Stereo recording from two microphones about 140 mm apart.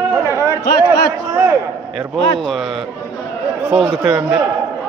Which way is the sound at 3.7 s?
5° right (ahead or behind).